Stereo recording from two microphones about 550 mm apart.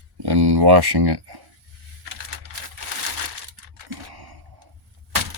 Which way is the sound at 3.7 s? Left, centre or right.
Right.